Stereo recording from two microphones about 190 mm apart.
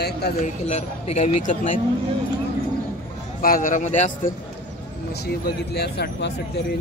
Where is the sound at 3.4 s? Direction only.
45° left (ahead or behind).